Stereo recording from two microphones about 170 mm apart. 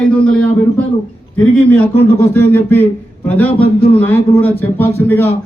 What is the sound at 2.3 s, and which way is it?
A man's voice, 10° left (ahead or behind).